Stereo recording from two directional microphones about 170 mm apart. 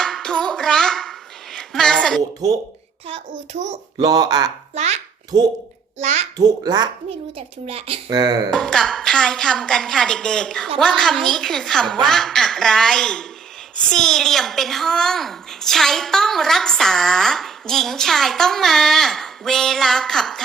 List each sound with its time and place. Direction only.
0.0 s a sound: 5° left (ahead or behind)
1.5 s a woman's voice: 5° left (ahead or behind)
3.5 s speech: 40° right (ahead or behind)
4.0 s speech: 20° right (ahead or behind)
4.7 s a child's voice: 40° right (ahead or behind)
5.3 s speech: 20° right (ahead or behind)
6.0 s a child's voice: 45° right (ahead or behind)
6.3 s speech: 25° right (ahead or behind)
7.1 s speech: 35° right (ahead or behind)
8.1 s speech: 25° right (ahead or behind)
8.4 s a woman's voice: 5° left (ahead or behind)